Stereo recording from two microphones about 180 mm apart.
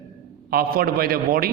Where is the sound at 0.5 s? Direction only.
55° right (ahead or behind).